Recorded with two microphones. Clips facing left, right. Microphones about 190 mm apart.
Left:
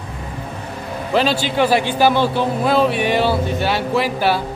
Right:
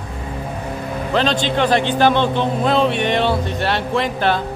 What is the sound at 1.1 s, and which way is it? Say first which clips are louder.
Speech: left 1 dB; 10° left (ahead or behind).